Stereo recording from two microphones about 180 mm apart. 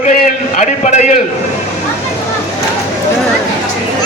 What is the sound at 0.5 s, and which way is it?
Speech, 40° left (ahead or behind).